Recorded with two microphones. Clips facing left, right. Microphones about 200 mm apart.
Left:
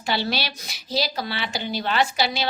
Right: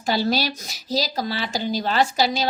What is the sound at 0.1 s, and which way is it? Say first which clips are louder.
Speech: right 4 dB; 40° right (ahead or behind).